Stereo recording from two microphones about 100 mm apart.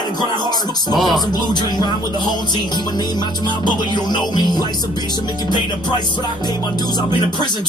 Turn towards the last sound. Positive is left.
turn(degrees=45)  # may be behind; listen again after turning